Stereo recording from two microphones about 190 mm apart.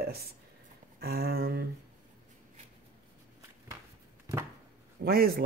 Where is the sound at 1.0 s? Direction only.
55° right (ahead or behind).